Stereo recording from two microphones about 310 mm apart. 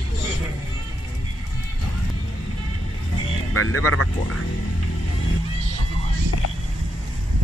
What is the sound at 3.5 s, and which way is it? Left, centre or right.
Speech, left.